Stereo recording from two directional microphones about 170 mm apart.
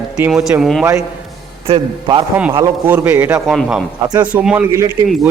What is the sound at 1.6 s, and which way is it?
Speech, 35° right (ahead or behind).